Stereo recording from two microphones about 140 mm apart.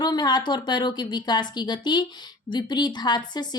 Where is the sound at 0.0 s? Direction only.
30° left (ahead or behind).